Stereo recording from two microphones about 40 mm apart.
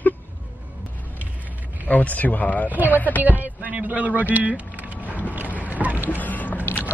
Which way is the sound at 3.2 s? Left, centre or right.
Right.